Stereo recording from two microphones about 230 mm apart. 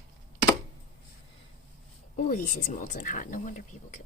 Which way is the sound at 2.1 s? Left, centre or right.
Left.